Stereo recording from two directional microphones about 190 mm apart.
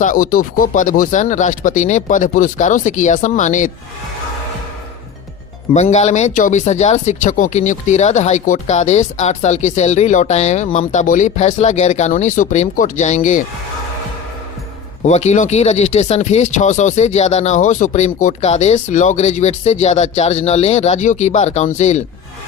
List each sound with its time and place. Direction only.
0.0 s speech: 45° left (ahead or behind)
5.7 s speech: 35° left (ahead or behind)
15.0 s speech: 35° left (ahead or behind)